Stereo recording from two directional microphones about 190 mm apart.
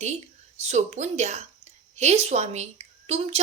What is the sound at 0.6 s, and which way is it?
A woman's voice, 35° right (ahead or behind).